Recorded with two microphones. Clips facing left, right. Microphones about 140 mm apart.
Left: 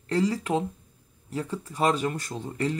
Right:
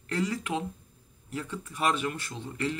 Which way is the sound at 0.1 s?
30° left (ahead or behind).